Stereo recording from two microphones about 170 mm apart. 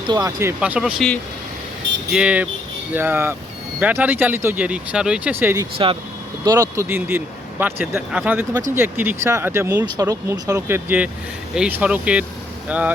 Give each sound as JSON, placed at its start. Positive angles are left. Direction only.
{"t": 0.1, "sound": "speech", "side_deg": -20}
{"t": 0.6, "sound": "speech", "side_deg": -5}
{"t": 2.1, "sound": "speech", "side_deg": -5}
{"t": 5.7, "sound": "speech", "side_deg": -30}
{"t": 6.4, "sound": "speech", "side_deg": -20}